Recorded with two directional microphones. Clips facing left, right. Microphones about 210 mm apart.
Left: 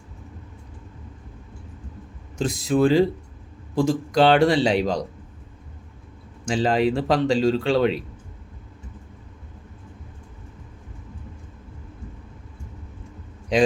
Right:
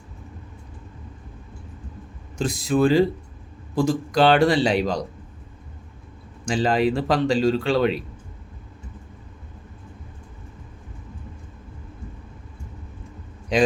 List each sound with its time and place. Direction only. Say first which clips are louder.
2.4 s a man's voice: even; 25° left (ahead or behind)
6.4 s a man's voice: even; 25° left (ahead or behind)
13.5 s speech: left 1 dB; 25° left (ahead or behind)